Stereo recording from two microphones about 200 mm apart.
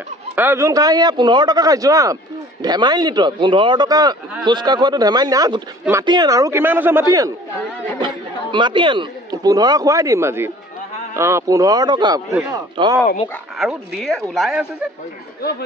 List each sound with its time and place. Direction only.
0.4 s speech: 10° right (ahead or behind)
13.6 s speech: centre (ahead or behind)